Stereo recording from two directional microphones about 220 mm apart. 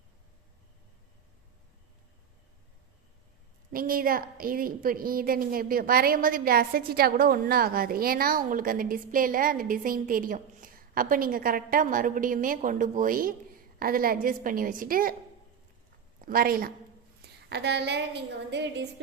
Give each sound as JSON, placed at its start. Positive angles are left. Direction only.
{"t": 3.7, "sound": "a woman's voice", "side_deg": -40}
{"t": 16.2, "sound": "a woman's voice", "side_deg": -40}
{"t": 17.2, "sound": "a sound", "side_deg": -50}